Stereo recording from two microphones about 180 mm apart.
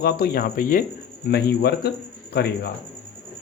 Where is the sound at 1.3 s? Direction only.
65° left (ahead or behind).